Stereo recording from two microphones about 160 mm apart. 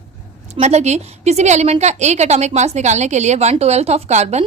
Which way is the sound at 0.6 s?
45° right (ahead or behind).